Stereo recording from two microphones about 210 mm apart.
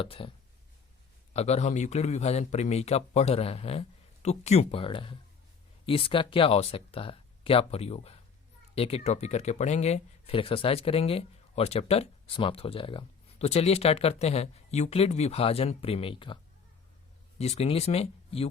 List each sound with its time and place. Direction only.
0.0 s speech: 25° left (ahead or behind)
1.3 s speech: 30° left (ahead or behind)